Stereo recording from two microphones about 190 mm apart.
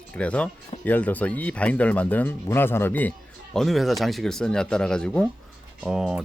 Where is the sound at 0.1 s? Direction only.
5° left (ahead or behind).